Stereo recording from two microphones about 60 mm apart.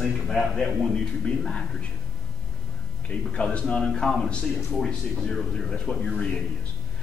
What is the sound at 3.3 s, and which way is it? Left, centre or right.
A man's voice, centre.